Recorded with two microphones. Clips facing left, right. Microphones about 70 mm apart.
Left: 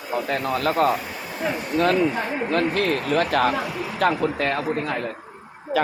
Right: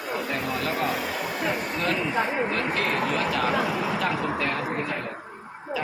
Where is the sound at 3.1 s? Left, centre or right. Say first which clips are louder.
Left 4 dB; left.